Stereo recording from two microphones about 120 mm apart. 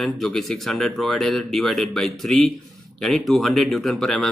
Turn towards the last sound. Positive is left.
turn(degrees=5)  # may be behind; listen again after turning